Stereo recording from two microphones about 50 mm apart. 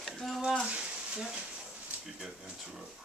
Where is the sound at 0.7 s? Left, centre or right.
Right.